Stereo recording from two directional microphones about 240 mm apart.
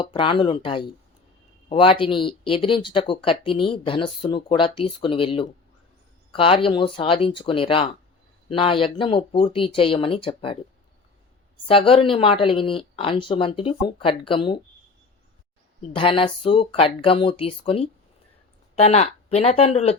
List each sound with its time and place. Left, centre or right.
0.0 s speech: left
11.7 s speech: left
16.0 s speech: left